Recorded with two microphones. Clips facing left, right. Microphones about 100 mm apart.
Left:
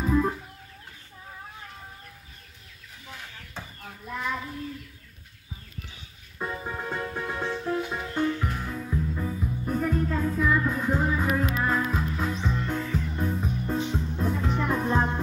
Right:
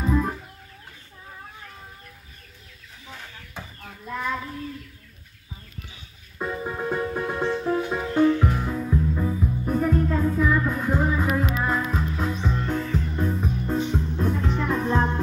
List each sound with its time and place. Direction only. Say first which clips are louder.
0.0 s music: even; centre (ahead or behind)
6.3 s music: right 4 dB; 10° right (ahead or behind)
8.3 s music: right 7 dB; 25° right (ahead or behind)
9.7 s music: right 4 dB; 5° right (ahead or behind)